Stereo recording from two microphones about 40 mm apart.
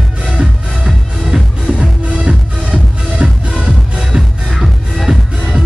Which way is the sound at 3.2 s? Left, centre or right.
Right.